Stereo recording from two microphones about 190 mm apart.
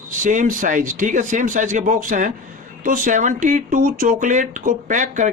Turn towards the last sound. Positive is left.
turn(degrees=-40)  # may be behind; listen again after turning